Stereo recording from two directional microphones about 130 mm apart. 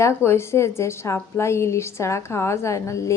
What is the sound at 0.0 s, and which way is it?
A woman's voice, 20° left (ahead or behind).